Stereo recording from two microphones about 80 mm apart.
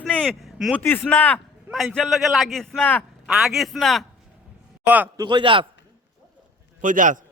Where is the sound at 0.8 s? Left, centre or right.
Left.